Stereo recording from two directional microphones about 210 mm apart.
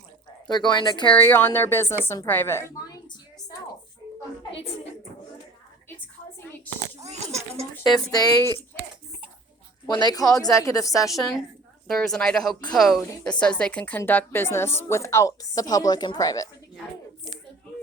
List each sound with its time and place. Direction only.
0.5 s a woman's voice: 20° left (ahead or behind)
1.1 s a woman's voice: 10° left (ahead or behind)
7.0 s speech: 30° right (ahead or behind)
8.1 s a woman's voice: 15° left (ahead or behind)
9.8 s a woman's voice: 20° left (ahead or behind)
11.9 s a woman's voice: centre (ahead or behind)